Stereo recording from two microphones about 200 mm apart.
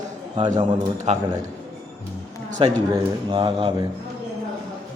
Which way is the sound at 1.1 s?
35° right (ahead or behind).